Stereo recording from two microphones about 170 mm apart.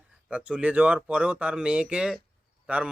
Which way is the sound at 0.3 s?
5° right (ahead or behind).